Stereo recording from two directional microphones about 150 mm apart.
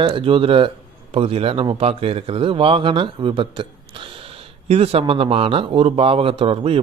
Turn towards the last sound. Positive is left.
turn(degrees=-35)  # may be behind; listen again after turning